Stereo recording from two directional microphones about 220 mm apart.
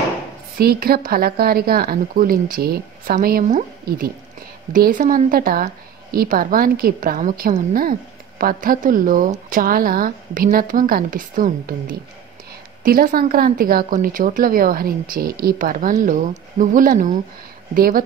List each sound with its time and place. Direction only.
0.6 s a woman's voice: 45° right (ahead or behind)